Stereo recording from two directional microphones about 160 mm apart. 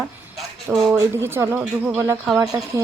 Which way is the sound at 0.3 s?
5° right (ahead or behind).